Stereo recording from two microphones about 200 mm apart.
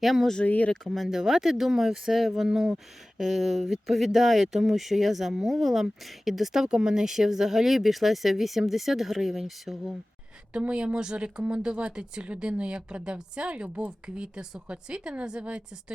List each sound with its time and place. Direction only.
0.0 s speech: centre (ahead or behind)